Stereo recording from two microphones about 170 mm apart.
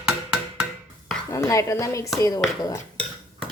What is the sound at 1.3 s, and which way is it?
A woman's voice, 20° left (ahead or behind).